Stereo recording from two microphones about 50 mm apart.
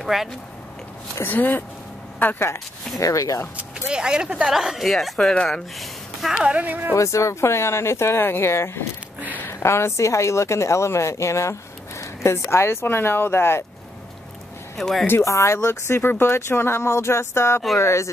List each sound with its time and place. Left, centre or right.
0.0 s speech: centre
1.3 s speech: left
3.1 s speech: left
3.9 s speech: centre
4.5 s speech: centre
5.5 s a sound: centre
6.3 s speech: centre
6.6 s speech: right
7.0 s speech: left
8.2 s a woman's voice: left
14.8 s speech: centre
15.2 s speech: left
17.7 s a woman's voice: left